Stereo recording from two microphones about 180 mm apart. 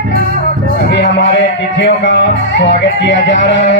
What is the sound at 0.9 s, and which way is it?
Music, 70° left (ahead or behind).